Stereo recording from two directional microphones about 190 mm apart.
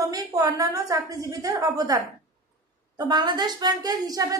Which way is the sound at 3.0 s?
20° right (ahead or behind).